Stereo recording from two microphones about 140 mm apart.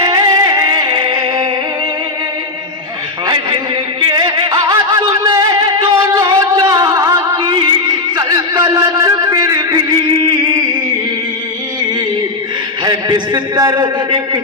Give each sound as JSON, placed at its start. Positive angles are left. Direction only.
{"t": 0.0, "sound": "music", "side_deg": -30}
{"t": 3.2, "sound": "a sound", "side_deg": -30}
{"t": 4.0, "sound": "music", "side_deg": -30}
{"t": 12.8, "sound": "a man's voice", "side_deg": -30}